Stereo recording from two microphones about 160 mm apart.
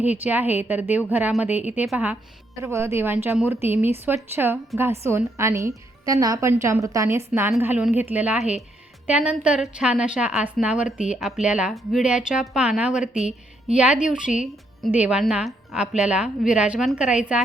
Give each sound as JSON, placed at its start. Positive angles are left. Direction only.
{"t": 0.0, "sound": "a woman's voice", "side_deg": -10}